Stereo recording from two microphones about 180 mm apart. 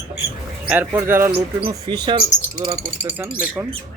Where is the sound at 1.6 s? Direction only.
25° right (ahead or behind).